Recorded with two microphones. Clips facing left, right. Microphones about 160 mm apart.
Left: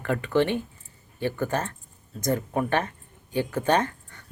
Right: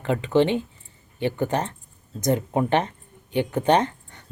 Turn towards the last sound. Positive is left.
turn(degrees=-20)  # may be behind; listen again after turning